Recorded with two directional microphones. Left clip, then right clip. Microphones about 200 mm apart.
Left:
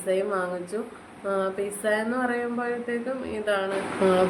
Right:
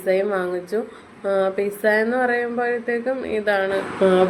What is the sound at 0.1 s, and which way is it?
A woman's voice, 25° right (ahead or behind).